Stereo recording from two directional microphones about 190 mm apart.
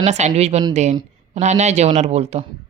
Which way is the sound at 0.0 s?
35° right (ahead or behind).